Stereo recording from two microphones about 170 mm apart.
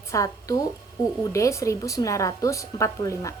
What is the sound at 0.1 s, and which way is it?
A woman's voice, 20° left (ahead or behind).